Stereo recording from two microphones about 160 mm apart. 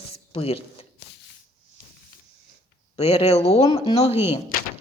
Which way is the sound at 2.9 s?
40° left (ahead or behind).